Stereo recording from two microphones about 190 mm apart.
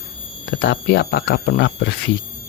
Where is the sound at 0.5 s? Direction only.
65° left (ahead or behind).